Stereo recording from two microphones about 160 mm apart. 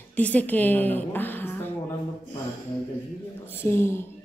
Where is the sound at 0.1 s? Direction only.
10° left (ahead or behind).